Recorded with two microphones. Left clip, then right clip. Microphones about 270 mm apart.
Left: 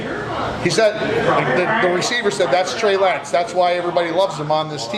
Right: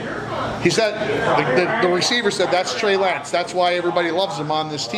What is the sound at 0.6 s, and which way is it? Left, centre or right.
Speech, right.